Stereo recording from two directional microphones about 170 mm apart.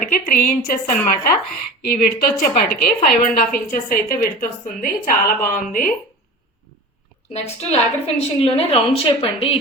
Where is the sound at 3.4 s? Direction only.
55° left (ahead or behind).